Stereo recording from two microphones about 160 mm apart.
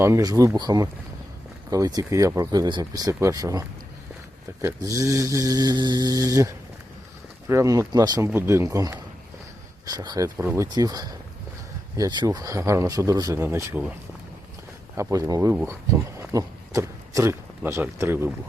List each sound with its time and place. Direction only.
0.0 s speech: 20° right (ahead or behind)
14.9 s speech: 20° right (ahead or behind)